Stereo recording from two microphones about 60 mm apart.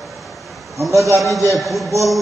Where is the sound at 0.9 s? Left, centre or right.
Right.